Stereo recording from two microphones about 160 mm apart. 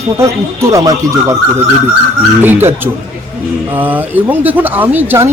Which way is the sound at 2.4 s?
15° right (ahead or behind).